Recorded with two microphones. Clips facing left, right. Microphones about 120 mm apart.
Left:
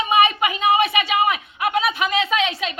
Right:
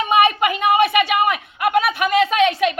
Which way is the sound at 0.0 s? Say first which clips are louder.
Right 2 dB; 55° right (ahead or behind).